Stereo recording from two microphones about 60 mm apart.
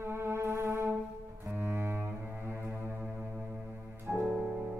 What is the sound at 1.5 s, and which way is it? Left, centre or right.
Double bass, right.